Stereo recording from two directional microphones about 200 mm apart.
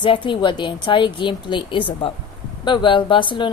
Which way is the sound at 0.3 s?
25° left (ahead or behind).